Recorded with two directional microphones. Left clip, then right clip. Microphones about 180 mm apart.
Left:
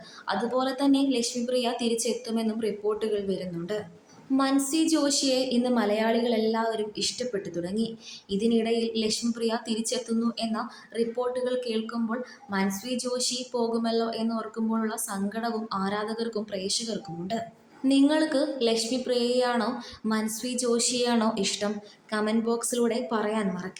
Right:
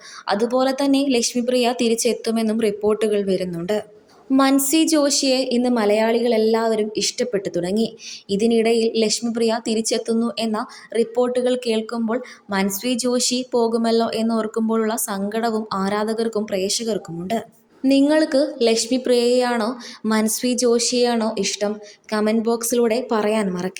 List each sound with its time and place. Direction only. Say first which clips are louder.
0.3 s a woman's voice: right 8 dB; 45° right (ahead or behind)